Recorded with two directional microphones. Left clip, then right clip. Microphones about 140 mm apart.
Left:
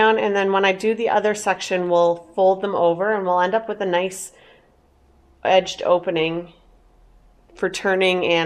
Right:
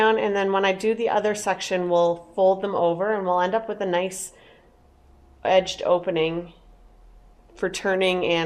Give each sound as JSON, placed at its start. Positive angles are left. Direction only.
{"t": 0.0, "sound": "speech", "side_deg": 50}
{"t": 7.5, "sound": "speech", "side_deg": 45}